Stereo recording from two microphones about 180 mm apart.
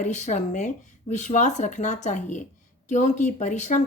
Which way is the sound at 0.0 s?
40° left (ahead or behind).